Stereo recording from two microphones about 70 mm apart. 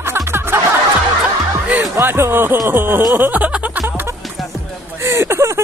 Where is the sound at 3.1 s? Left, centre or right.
Right.